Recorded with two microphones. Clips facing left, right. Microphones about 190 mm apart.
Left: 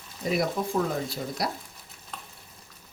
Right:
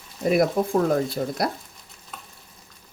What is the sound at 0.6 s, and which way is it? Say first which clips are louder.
Speech: right 6 dB; 50° right (ahead or behind).